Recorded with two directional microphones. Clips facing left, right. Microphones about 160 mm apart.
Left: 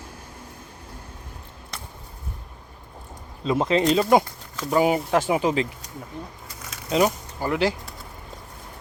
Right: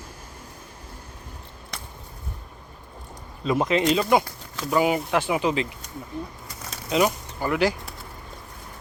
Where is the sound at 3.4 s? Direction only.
25° left (ahead or behind).